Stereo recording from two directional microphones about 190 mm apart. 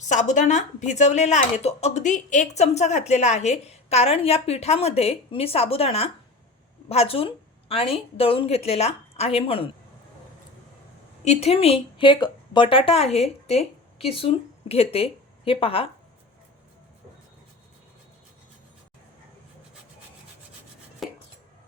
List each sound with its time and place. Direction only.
0.0 s speech: 40° left (ahead or behind)
11.3 s speech: 35° left (ahead or behind)
21.0 s chopping: centre (ahead or behind)